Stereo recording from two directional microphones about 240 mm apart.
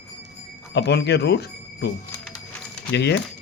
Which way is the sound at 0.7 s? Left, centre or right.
Left.